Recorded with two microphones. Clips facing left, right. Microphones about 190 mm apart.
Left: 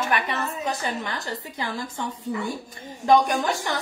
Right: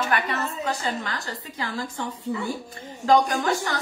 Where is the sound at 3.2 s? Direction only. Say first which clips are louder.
Even; 20° left (ahead or behind).